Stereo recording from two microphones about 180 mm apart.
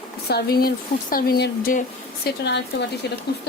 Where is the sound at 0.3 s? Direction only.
60° left (ahead or behind).